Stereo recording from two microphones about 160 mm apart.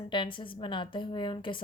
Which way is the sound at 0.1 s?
30° left (ahead or behind).